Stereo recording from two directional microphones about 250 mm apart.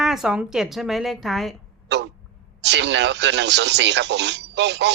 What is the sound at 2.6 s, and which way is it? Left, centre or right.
Speech, right.